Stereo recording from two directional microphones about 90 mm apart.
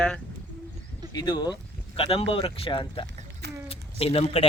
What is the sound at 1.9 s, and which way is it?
Speech, 90° left.